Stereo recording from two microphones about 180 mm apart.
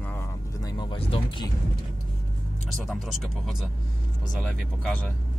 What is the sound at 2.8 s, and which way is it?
Speech, centre (ahead or behind).